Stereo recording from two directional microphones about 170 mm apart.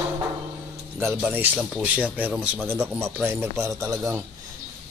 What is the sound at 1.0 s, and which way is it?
A man's voice, 10° right (ahead or behind).